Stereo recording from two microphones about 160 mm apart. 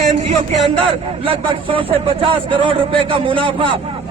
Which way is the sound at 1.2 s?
35° right (ahead or behind).